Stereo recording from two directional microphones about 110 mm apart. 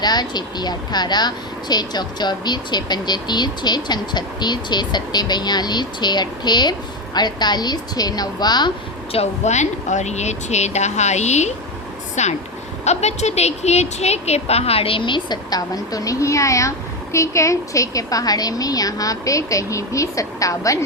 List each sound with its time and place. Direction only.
0.0 s speech: 40° left (ahead or behind)
9.1 s speech: 90° left; by 20.7 s 30° left (ahead or behind)